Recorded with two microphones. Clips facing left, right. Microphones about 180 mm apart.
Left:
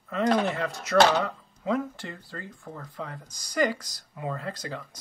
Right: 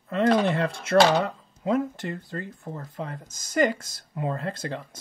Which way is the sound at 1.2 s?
20° right (ahead or behind).